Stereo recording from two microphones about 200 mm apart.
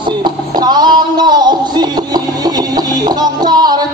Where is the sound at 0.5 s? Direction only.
20° right (ahead or behind).